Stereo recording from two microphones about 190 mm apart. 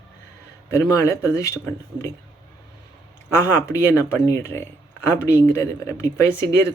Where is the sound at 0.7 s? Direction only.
15° left (ahead or behind).